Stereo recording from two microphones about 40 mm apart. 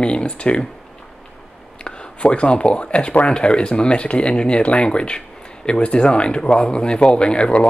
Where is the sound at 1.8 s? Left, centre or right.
Left.